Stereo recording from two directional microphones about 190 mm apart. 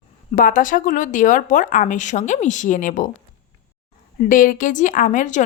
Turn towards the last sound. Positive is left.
turn(degrees=40)  # may be behind; listen again after turning